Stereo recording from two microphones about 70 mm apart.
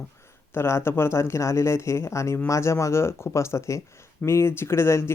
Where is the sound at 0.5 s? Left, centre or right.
Left.